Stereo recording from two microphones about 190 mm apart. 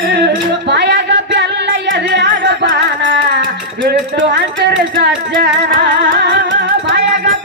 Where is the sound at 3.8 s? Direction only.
65° right (ahead or behind).